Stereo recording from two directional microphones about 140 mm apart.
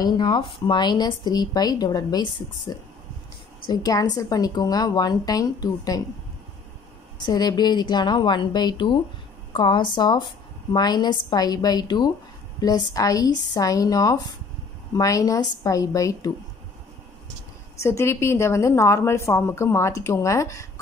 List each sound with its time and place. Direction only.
0.0 s a woman's voice: 30° left (ahead or behind)
7.2 s a woman's voice: 30° left (ahead or behind)
17.7 s a woman's voice: 20° left (ahead or behind)